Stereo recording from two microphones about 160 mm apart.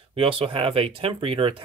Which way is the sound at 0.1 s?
35° right (ahead or behind).